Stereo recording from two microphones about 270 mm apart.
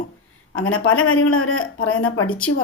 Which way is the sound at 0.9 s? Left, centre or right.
Left.